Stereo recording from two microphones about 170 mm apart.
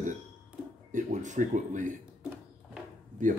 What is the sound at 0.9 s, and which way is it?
Speech, 45° right (ahead or behind).